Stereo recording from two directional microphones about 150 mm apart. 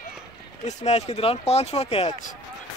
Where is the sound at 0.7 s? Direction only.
50° left (ahead or behind).